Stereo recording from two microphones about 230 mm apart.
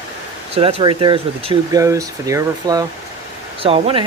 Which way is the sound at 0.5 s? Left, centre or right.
Right.